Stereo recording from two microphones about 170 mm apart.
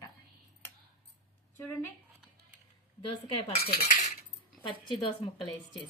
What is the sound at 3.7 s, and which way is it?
Cutlery, 65° left (ahead or behind).